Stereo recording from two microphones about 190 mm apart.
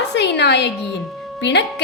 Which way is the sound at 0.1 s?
65° left (ahead or behind).